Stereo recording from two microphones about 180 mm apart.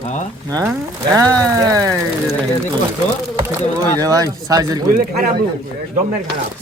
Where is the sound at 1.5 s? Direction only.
20° right (ahead or behind).